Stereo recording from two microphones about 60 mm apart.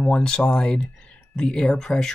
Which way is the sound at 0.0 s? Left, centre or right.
Centre.